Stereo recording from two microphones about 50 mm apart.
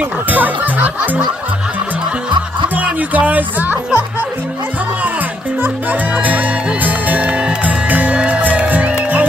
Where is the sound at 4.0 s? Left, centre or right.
Right.